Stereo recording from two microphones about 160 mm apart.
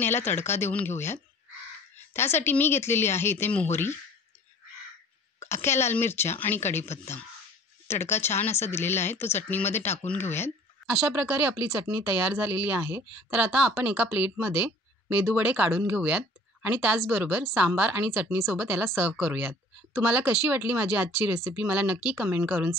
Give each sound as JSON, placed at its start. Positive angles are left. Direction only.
{"t": 0.0, "sound": "a woman's voice", "side_deg": 15}
{"t": 5.5, "sound": "a woman's voice", "side_deg": 15}
{"t": 10.9, "sound": "speech", "side_deg": -15}